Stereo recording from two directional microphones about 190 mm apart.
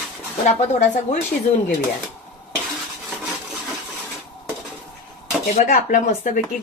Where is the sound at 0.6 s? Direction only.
40° left (ahead or behind).